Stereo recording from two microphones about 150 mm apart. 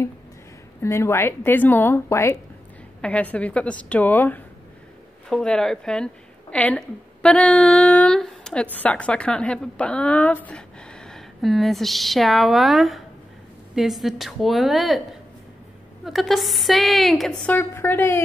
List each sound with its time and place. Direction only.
0.8 s a woman's voice: 15° left (ahead or behind); by 15.0 s centre (ahead or behind)
16.1 s a woman's voice: centre (ahead or behind)
17.5 s a woman's voice: 15° left (ahead or behind)